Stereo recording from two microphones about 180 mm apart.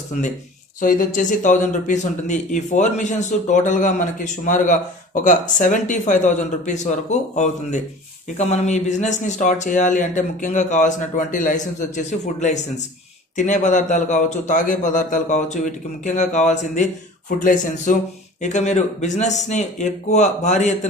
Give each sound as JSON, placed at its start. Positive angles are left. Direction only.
{"t": 0.1, "sound": "a man's voice", "side_deg": 45}